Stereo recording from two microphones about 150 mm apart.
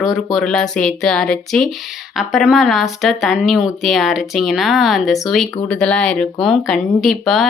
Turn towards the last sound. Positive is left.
turn(degrees=0)  # may be behind; listen again after turning